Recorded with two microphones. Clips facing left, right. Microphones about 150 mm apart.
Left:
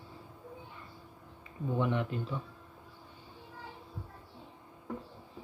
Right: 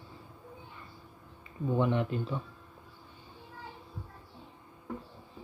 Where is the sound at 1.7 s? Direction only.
30° right (ahead or behind).